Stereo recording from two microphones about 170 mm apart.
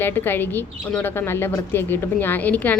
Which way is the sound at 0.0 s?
10° left (ahead or behind).